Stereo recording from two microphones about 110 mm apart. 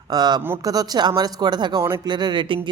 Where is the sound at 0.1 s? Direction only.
40° right (ahead or behind).